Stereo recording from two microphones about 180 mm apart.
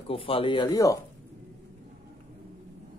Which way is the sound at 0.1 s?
30° left (ahead or behind).